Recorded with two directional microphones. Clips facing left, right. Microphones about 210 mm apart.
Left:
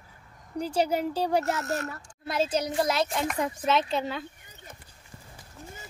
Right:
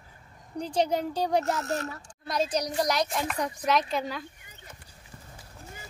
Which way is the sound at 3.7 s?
25° left (ahead or behind).